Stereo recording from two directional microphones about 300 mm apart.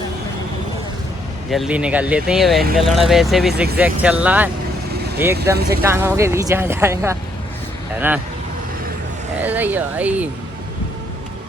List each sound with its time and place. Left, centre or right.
1.5 s speech: centre
5.5 s speech: right
5.9 s speech: centre
9.4 s speech: centre